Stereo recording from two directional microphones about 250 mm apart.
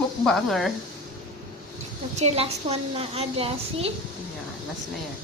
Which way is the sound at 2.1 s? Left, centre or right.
Right.